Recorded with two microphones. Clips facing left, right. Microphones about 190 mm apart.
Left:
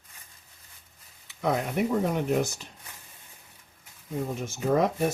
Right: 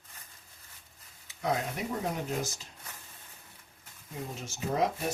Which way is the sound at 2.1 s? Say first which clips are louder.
Left 8 dB; 60° left (ahead or behind).